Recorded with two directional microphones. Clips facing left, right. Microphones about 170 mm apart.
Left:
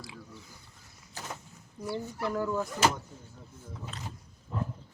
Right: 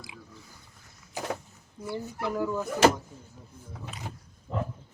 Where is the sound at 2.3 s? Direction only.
5° right (ahead or behind).